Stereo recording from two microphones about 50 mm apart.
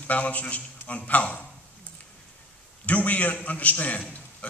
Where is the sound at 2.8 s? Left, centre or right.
Left.